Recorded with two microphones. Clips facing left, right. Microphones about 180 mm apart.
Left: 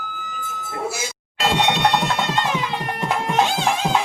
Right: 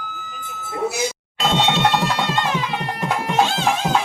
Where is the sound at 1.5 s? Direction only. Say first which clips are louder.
Right 1 dB; 15° left (ahead or behind).